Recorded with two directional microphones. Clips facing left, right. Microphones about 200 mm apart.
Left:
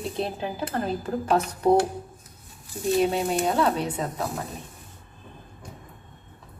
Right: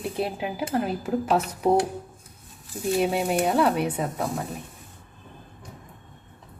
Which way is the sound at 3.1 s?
10° right (ahead or behind).